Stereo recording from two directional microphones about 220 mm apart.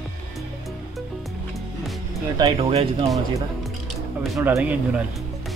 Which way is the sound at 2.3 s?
20° right (ahead or behind).